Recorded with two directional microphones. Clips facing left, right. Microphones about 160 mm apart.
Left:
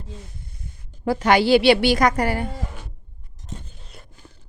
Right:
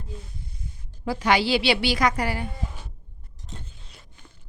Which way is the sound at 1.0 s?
50° left (ahead or behind).